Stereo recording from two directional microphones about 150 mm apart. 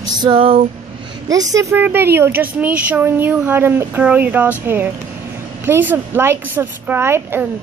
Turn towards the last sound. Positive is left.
turn(degrees=-15)  # may be behind; listen again after turning